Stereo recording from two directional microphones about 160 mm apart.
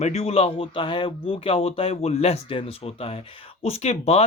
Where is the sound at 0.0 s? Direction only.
40° left (ahead or behind).